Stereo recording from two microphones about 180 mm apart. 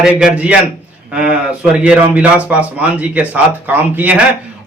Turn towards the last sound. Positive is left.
turn(degrees=-10)  # may be behind; listen again after turning